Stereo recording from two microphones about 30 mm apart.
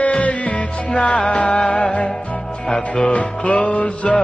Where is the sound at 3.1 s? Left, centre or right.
Left.